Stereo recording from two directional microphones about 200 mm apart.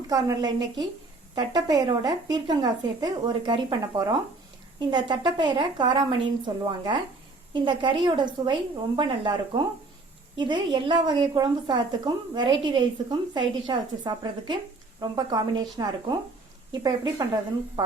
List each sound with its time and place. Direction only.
0.1 s a woman's voice: 20° right (ahead or behind)